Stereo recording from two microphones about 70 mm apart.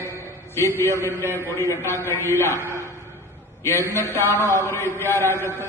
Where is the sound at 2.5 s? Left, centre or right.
Right.